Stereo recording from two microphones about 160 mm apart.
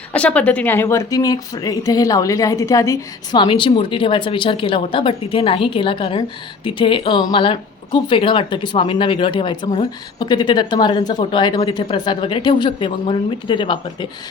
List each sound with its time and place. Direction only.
0.1 s speech: 10° left (ahead or behind)
3.4 s speech: 30° left (ahead or behind)